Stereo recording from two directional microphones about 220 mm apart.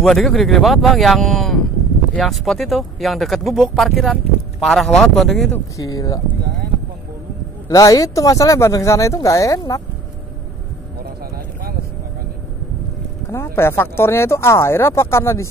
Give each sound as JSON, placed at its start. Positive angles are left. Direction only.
{"t": 0.0, "sound": "speech", "side_deg": 0}
{"t": 5.8, "sound": "speech", "side_deg": 15}
{"t": 7.6, "sound": "speech", "side_deg": 15}
{"t": 13.3, "sound": "speech", "side_deg": 10}